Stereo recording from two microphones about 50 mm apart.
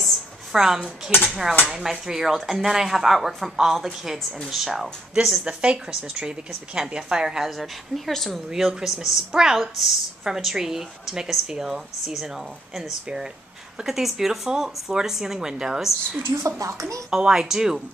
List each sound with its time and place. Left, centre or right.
0.0 s a sound: centre
1.7 s a woman's voice: centre
7.4 s speech: centre
8.5 s a woman's voice: centre
16.4 s speech: right
17.2 s a woman's voice: centre